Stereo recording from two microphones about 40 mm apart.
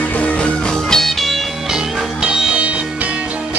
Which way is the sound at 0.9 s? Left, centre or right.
Centre.